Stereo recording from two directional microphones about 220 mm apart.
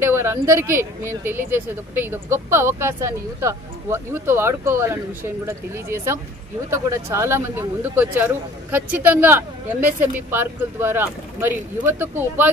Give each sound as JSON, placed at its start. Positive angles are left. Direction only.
{"t": 0.0, "sound": "speech", "side_deg": -10}